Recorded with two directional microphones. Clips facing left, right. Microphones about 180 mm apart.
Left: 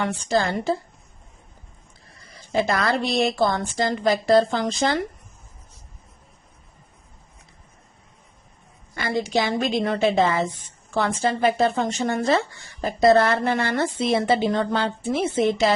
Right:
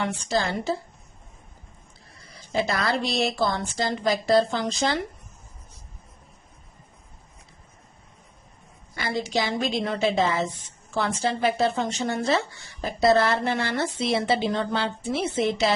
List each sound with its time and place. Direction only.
0.0 s a woman's voice: 55° left (ahead or behind)
2.5 s a woman's voice: 55° left (ahead or behind)
9.0 s a woman's voice: 55° left (ahead or behind)